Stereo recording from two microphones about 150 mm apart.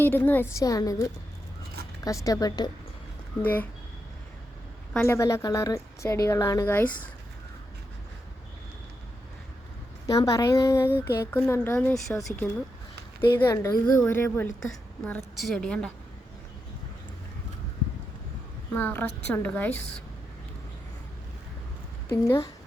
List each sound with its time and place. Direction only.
0.0 s a woman's voice: 15° left (ahead or behind)
3.4 s speech: 10° left (ahead or behind)
4.9 s a woman's voice: 20° left (ahead or behind)
10.2 s speech: 25° left (ahead or behind)
13.4 s a woman's voice: 20° left (ahead or behind)
13.8 s a woman's voice: 10° left (ahead or behind)
18.7 s speech: 15° left (ahead or behind)
22.1 s a woman's voice: 20° left (ahead or behind)